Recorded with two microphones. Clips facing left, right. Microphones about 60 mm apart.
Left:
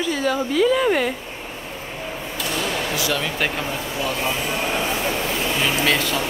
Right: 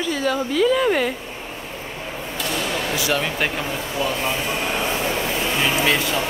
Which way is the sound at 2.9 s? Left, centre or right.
Right.